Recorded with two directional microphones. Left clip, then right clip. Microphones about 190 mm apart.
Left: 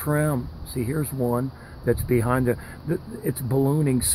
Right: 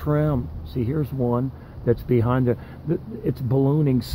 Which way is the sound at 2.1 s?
Centre (ahead or behind).